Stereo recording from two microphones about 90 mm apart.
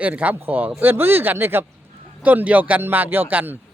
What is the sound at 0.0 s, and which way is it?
Speech, 15° right (ahead or behind).